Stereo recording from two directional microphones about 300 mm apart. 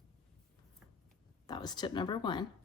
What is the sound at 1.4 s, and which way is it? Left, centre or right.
Speech, centre.